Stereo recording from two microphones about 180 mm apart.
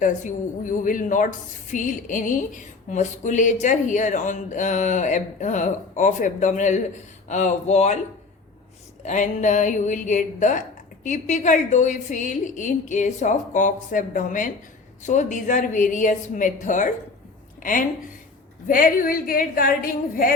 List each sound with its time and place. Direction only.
0.0 s speech: 45° left (ahead or behind)
9.0 s a woman's voice: 45° left (ahead or behind)